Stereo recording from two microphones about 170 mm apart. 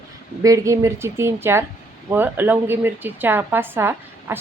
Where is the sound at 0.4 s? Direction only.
20° right (ahead or behind).